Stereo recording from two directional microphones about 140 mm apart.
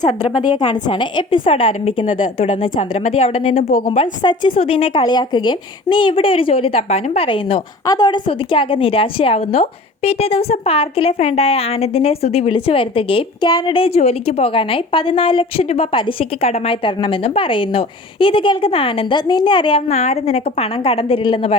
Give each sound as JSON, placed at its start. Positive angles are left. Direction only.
{"t": 0.0, "sound": "a woman's voice", "side_deg": 35}
{"t": 3.5, "sound": "a woman's voice", "side_deg": 85}
{"t": 3.9, "sound": "a woman's voice", "side_deg": 35}
{"t": 7.9, "sound": "a woman's voice", "side_deg": 30}